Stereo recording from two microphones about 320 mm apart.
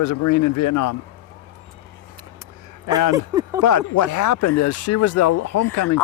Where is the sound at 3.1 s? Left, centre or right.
Centre.